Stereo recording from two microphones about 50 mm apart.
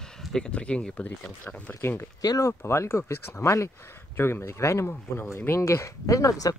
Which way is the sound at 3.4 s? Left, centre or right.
Left.